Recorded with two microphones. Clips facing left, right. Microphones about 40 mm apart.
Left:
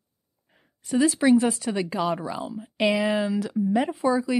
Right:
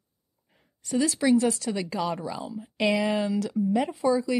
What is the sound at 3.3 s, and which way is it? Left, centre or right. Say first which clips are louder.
Speech: left 1 dB; left.